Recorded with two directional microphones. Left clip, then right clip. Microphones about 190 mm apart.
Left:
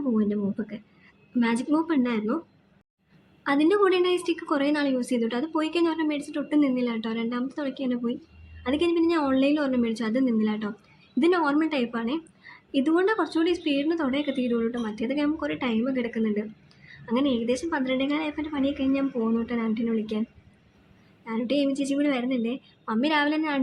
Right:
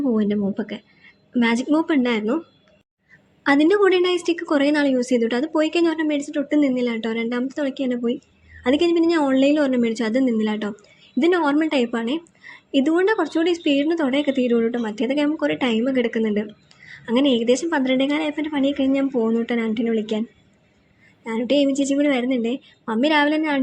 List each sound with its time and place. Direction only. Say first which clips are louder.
0.2 s a woman's voice: right 5 dB; 25° right (ahead or behind)
3.4 s a woman's voice: right 5 dB; 25° right (ahead or behind)
21.2 s a woman's voice: right 6 dB; 20° right (ahead or behind)